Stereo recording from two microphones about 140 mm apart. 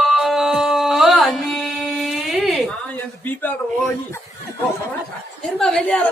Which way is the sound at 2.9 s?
15° left (ahead or behind).